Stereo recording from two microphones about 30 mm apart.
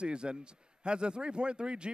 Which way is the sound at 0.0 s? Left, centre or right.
Right.